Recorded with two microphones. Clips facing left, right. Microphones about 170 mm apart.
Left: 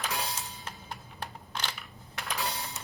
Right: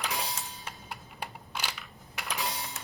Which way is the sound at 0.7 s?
10° right (ahead or behind).